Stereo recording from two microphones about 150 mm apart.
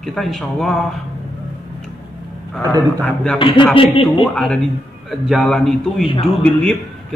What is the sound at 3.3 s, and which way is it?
Speech, 35° left (ahead or behind).